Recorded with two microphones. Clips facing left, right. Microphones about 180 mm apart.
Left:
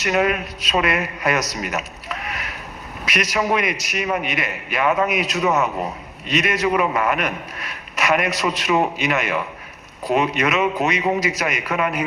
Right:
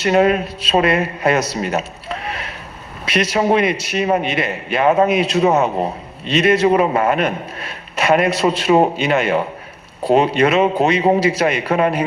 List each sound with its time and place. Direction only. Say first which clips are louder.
0.0 s a man's voice: right 6 dB; 30° right (ahead or behind)